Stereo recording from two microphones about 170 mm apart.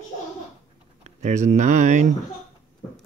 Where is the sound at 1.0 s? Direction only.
45° right (ahead or behind).